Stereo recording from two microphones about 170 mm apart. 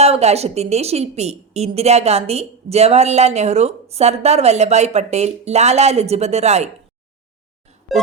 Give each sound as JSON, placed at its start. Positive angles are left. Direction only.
{"t": 0.0, "sound": "a woman's voice", "side_deg": -40}